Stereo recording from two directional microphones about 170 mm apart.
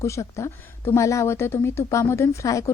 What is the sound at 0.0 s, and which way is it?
A woman's voice, 15° left (ahead or behind).